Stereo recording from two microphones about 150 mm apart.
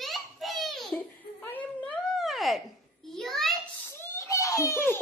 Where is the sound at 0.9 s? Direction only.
10° left (ahead or behind).